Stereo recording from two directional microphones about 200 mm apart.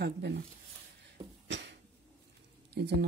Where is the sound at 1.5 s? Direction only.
60° right (ahead or behind).